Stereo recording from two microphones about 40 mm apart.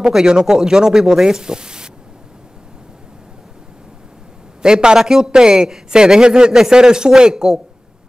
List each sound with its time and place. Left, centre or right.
0.0 s a man's voice: centre
4.6 s a man's voice: centre